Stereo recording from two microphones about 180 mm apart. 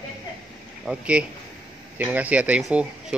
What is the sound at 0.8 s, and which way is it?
Speech, 5° right (ahead or behind).